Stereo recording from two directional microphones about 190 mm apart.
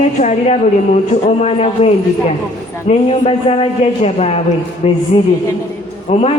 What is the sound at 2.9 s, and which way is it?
A woman's voice, 30° left (ahead or behind).